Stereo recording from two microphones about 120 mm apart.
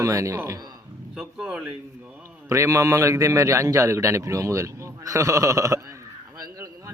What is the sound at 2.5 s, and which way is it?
A man's voice, 25° right (ahead or behind).